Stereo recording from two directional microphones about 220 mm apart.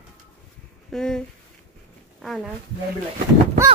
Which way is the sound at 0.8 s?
Centre (ahead or behind).